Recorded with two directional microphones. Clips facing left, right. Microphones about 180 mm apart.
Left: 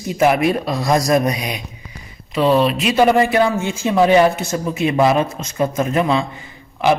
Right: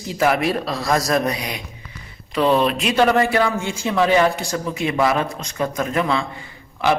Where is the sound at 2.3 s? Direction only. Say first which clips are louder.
Left 2 dB; 5° left (ahead or behind).